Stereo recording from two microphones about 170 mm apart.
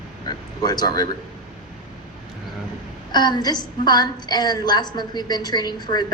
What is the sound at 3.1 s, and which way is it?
A woman's voice, 25° left (ahead or behind).